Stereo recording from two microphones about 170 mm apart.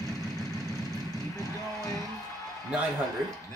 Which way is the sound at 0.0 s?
20° right (ahead or behind).